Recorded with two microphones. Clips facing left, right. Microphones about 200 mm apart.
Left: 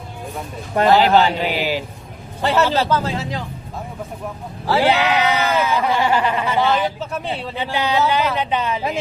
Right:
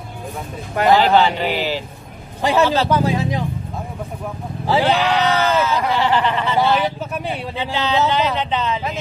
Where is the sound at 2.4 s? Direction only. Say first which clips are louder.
Right 1 dB; 15° right (ahead or behind).